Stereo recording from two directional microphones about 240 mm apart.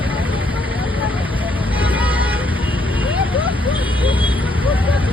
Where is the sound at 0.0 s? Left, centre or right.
Centre.